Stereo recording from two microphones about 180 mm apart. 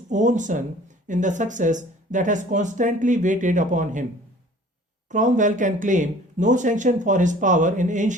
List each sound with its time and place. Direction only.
0.1 s speech: 45° right (ahead or behind)
5.0 s speech: 45° right (ahead or behind)